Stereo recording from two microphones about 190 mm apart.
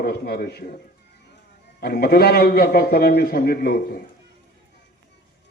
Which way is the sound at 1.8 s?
55° left (ahead or behind).